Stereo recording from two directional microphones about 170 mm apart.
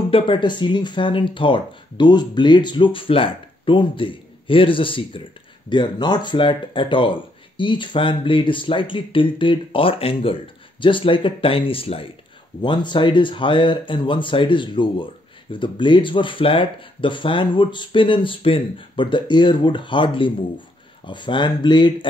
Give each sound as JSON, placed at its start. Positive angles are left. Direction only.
{"t": 0.1, "sound": "speech", "side_deg": 30}